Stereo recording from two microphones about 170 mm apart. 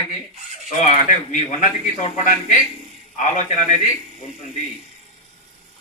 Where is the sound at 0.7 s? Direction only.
45° left (ahead or behind).